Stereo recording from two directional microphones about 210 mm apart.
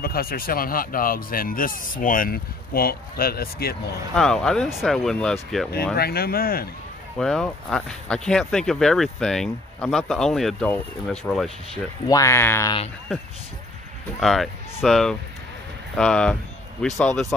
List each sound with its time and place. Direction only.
0.0 s speech: 45° left (ahead or behind)
4.1 s speech: 5° left (ahead or behind)
5.9 s speech: 45° left (ahead or behind)
7.2 s speech: 5° left (ahead or behind)
11.7 s speech: 15° left (ahead or behind)
14.2 s speech: centre (ahead or behind)